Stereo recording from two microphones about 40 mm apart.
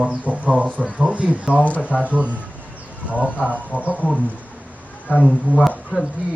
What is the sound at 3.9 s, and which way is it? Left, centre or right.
Speech, left.